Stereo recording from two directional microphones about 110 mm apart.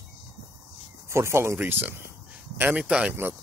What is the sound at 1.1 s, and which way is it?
Speech, 25° right (ahead or behind).